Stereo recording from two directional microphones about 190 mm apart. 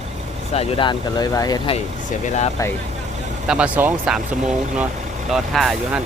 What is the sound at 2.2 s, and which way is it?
Speech, 35° left (ahead or behind).